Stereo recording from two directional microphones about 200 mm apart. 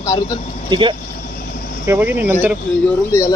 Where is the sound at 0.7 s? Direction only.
25° right (ahead or behind).